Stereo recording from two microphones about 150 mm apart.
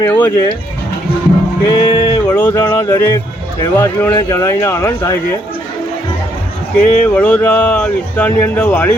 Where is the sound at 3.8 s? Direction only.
15° left (ahead or behind).